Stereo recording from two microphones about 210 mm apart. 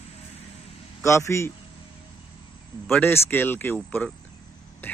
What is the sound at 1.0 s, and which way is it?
Speech, 15° left (ahead or behind).